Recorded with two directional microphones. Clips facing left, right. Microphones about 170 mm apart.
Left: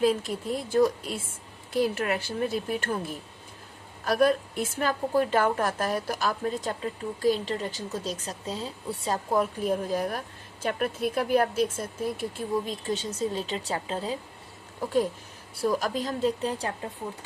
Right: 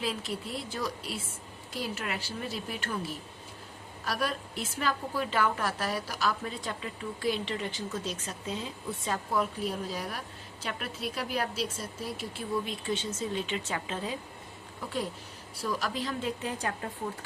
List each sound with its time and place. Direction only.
0.0 s speech: 50° left (ahead or behind)
12.6 s speech: 40° left (ahead or behind)
15.6 s speech: 45° left (ahead or behind); by 16.9 s 30° left (ahead or behind)